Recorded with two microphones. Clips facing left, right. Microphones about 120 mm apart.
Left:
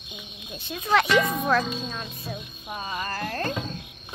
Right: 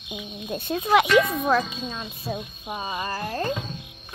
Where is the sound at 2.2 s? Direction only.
40° right (ahead or behind).